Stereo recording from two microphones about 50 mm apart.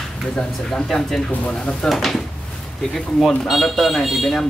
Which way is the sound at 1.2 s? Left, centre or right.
Left.